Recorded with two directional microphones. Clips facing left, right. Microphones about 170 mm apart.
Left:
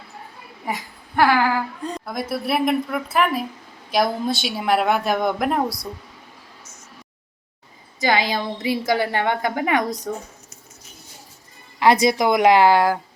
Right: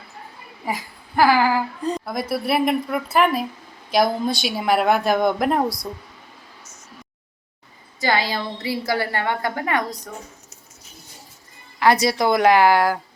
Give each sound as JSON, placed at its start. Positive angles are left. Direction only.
{"t": 0.6, "sound": "a woman's voice", "side_deg": 0}
{"t": 8.0, "sound": "a woman's voice", "side_deg": 15}
{"t": 11.8, "sound": "speech", "side_deg": 20}